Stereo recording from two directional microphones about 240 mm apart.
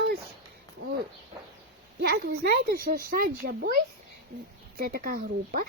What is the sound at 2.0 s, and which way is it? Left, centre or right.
Speech, right.